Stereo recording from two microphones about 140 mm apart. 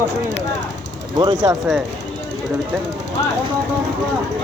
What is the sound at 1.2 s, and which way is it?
Speech, 35° right (ahead or behind).